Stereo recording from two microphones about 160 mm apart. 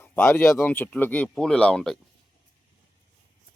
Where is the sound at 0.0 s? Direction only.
15° left (ahead or behind).